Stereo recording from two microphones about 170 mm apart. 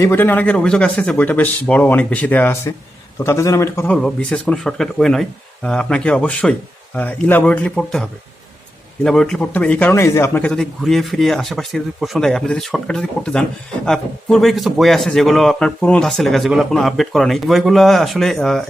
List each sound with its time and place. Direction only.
0.0 s speech: 15° left (ahead or behind)
3.9 s a man's voice: 5° left (ahead or behind)